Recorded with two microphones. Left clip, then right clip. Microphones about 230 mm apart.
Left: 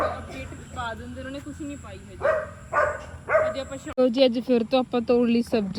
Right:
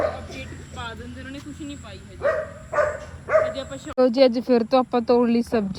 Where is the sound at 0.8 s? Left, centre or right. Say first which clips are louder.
Left 3 dB; centre.